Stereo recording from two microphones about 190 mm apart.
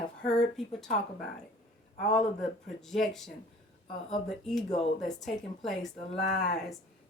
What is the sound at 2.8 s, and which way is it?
A woman's voice, centre (ahead or behind).